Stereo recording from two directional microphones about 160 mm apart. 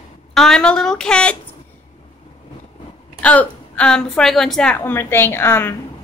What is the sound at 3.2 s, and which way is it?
A woman's voice, 10° left (ahead or behind).